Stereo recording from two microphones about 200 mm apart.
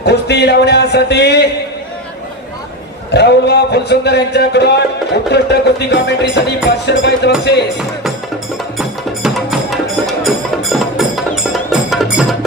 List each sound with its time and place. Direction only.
0.0 s speech: 55° left (ahead or behind)
3.1 s speech: 55° left (ahead or behind)
8.8 s music: centre (ahead or behind)